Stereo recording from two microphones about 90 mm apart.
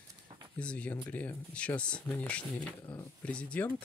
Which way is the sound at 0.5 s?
15° left (ahead or behind).